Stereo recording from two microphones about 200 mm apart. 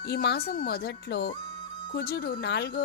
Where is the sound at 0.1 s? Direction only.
55° left (ahead or behind).